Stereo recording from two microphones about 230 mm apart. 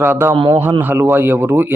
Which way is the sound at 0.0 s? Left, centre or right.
Centre.